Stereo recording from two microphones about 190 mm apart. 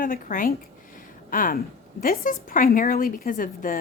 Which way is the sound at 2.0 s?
50° left (ahead or behind).